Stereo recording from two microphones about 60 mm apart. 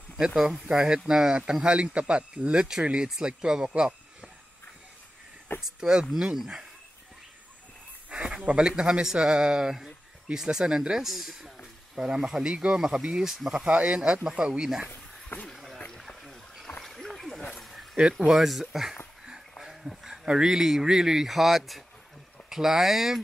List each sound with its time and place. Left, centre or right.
0.7 s speech: centre
5.6 s speech: centre
8.1 s speech: centre
13.7 s speech: right
14.9 s a sound: left
15.4 s a sound: centre
18.1 s speech: centre
19.6 s a sound: centre
20.2 s speech: centre